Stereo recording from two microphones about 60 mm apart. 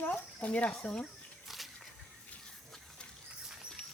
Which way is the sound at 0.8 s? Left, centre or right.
Centre.